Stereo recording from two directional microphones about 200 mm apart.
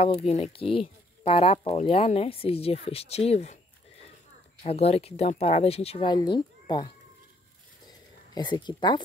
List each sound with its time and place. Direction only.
0.3 s speech: 30° left (ahead or behind)
4.6 s speech: 30° left (ahead or behind)
8.4 s speech: 20° left (ahead or behind)